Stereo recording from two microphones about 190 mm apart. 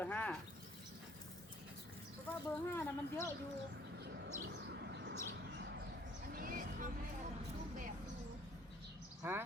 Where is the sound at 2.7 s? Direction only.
15° left (ahead or behind).